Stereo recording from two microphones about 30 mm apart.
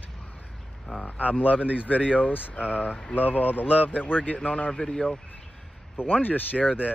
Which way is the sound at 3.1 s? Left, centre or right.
Left.